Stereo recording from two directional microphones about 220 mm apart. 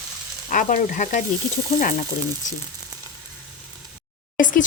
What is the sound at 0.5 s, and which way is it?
Speech, 35° left (ahead or behind).